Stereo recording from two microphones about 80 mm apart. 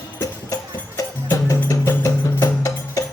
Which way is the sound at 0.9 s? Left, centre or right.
Left.